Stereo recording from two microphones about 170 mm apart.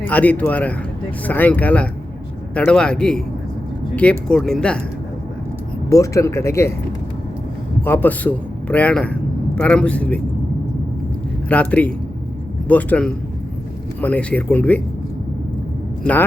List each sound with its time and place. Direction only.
0.0 s speech: 10° left (ahead or behind)
5.9 s speech: 20° left (ahead or behind)
7.8 s a man's voice: 10° left (ahead or behind)
11.4 s speech: 10° left (ahead or behind)